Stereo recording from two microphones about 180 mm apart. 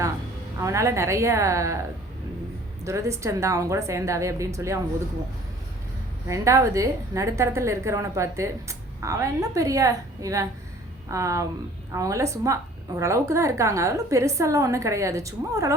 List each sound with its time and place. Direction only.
0.6 s a woman's voice: 15° right (ahead or behind)
2.8 s a woman's voice: 15° right (ahead or behind)
6.2 s a woman's voice: 15° right (ahead or behind)